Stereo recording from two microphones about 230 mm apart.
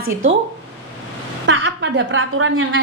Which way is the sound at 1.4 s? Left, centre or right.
Right.